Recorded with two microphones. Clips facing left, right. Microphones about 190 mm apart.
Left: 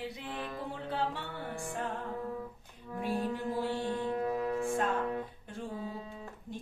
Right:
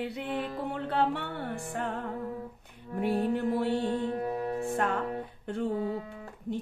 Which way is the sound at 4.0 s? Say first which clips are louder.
Right 1 dB; 30° right (ahead or behind).